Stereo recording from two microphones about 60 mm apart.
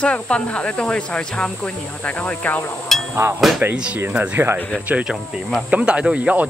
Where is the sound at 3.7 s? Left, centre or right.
Centre.